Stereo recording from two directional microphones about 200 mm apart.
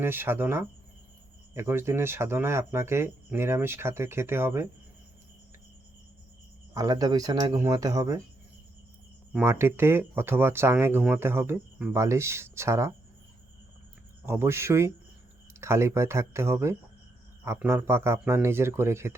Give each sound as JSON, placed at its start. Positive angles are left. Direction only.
{"t": 0.0, "sound": "speech", "side_deg": -10}
{"t": 6.7, "sound": "speech", "side_deg": -20}
{"t": 9.3, "sound": "speech", "side_deg": -10}
{"t": 14.3, "sound": "speech", "side_deg": -15}